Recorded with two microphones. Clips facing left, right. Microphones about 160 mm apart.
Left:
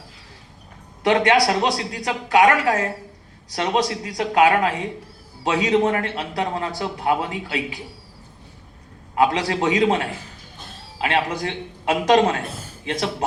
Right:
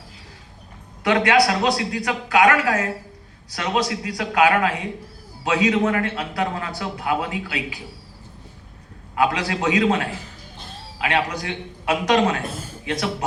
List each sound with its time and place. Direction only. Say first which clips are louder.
1.0 s a man's voice: left 1 dB; 30° left (ahead or behind)
9.1 s a man's voice: left 2 dB; 25° left (ahead or behind)